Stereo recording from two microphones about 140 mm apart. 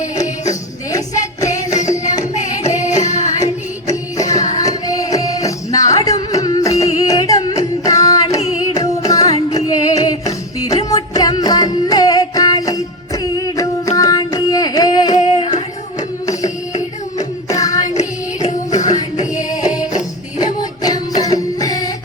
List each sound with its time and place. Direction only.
0.9 s music: 25° left (ahead or behind)
2.3 s music: 55° left (ahead or behind)
3.8 s music: 25° left (ahead or behind)
8.6 s carnatic music: 25° left (ahead or behind)
9.6 s music: 25° left (ahead or behind)
15.1 s singing: 45° left (ahead or behind)
16.0 s music: 25° left (ahead or behind)
17.5 s music: 25° left (ahead or behind)
17.8 s music: 55° left (ahead or behind)
20.4 s music: 30° left (ahead or behind)